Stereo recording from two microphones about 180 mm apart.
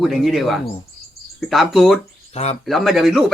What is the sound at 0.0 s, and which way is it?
Speech, centre (ahead or behind).